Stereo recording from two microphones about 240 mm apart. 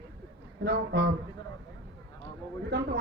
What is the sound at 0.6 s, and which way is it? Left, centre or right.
Speech, right.